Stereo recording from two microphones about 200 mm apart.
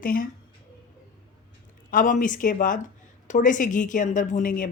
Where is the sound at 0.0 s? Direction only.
45° left (ahead or behind).